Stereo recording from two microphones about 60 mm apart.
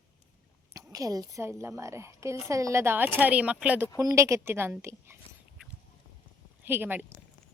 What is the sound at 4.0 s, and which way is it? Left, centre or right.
A woman's voice, right.